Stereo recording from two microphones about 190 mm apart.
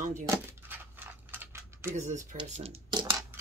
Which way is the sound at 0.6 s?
10° right (ahead or behind).